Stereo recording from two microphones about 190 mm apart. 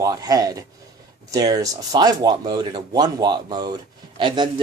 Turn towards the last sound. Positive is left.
turn(degrees=-25)  # may be behind; listen again after turning